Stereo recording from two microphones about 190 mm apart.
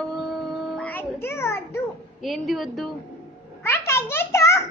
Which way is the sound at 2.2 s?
Centre (ahead or behind).